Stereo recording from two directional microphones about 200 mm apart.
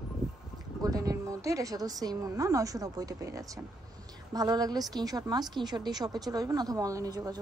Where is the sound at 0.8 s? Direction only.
20° right (ahead or behind).